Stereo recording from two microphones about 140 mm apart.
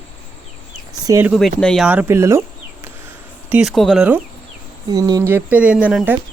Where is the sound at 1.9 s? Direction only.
15° right (ahead or behind).